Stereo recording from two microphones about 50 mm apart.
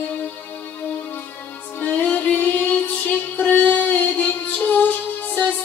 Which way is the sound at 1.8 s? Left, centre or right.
Left.